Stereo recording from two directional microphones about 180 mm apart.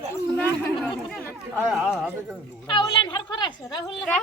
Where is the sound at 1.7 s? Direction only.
5° right (ahead or behind).